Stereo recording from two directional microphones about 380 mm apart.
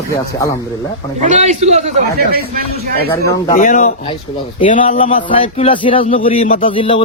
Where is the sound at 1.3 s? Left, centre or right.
Centre.